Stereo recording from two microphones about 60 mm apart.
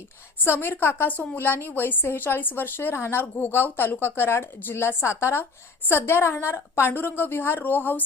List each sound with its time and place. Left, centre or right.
0.8 s a woman's voice: left
1.1 s a woman's voice: left
1.4 s a woman's voice: left